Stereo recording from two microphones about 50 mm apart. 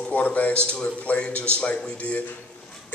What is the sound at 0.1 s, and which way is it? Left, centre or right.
Speech, left.